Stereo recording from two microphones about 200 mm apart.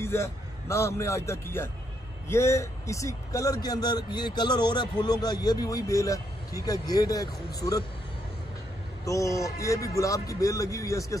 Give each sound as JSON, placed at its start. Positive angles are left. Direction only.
{"t": 0.0, "sound": "a man's voice", "side_deg": 10}
{"t": 9.0, "sound": "a man's voice", "side_deg": 15}